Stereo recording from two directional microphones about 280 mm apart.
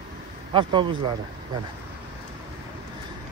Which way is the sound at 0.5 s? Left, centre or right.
Centre.